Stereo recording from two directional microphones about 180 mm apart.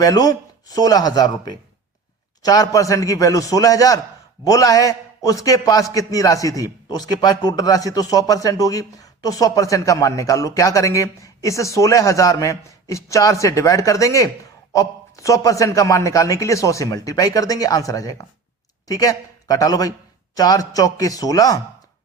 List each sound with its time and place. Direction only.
0.0 s a man's voice: 20° left (ahead or behind)